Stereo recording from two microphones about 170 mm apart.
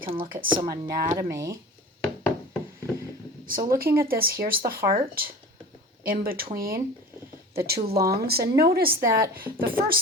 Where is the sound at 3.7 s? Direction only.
60° right (ahead or behind).